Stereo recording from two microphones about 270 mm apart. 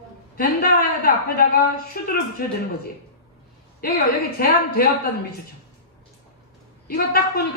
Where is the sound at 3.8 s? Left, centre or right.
Left.